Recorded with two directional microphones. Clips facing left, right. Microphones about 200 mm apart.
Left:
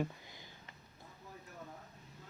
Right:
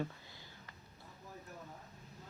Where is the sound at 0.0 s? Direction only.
15° left (ahead or behind).